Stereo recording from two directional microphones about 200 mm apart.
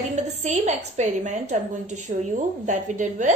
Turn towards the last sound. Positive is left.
turn(degrees=-35)  # may be behind; listen again after turning